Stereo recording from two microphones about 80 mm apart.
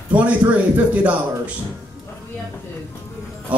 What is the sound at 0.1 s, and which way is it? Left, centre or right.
Speech, centre.